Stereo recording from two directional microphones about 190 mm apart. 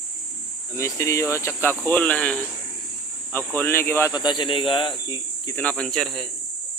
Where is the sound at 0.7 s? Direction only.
15° left (ahead or behind).